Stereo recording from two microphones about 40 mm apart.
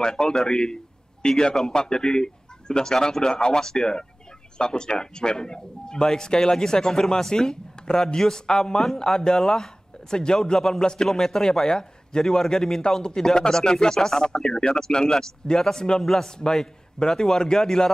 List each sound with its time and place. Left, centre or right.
0.0 s speech: centre